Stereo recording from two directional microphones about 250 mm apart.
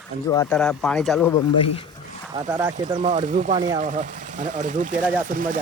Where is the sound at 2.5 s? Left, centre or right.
Centre.